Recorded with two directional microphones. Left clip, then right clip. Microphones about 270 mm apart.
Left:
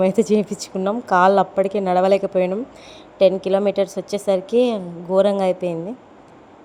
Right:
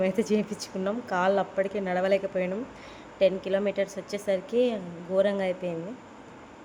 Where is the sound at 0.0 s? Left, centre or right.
Left.